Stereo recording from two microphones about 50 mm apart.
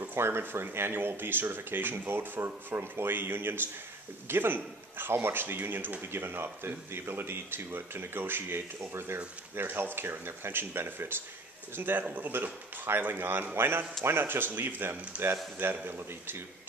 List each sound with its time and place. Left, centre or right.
0.0 s a man's voice: right
12.0 s speech: right
13.0 s a man's voice: right